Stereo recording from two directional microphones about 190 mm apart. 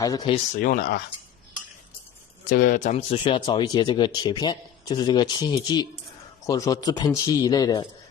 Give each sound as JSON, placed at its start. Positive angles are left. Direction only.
{"t": 0.0, "sound": "speech", "side_deg": 20}
{"t": 0.5, "sound": "speech", "side_deg": 45}
{"t": 2.5, "sound": "speech", "side_deg": 45}